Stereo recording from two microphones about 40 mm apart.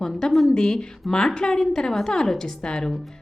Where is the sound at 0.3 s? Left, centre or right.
Centre.